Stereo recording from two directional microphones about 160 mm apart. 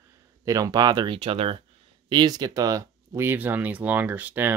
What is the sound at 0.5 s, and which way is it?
Speech, 20° right (ahead or behind).